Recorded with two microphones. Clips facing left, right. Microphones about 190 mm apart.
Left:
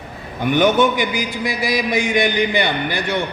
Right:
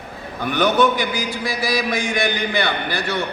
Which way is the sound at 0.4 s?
15° left (ahead or behind).